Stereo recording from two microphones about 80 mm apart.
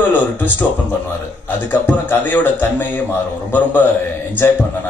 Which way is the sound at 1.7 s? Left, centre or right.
Left.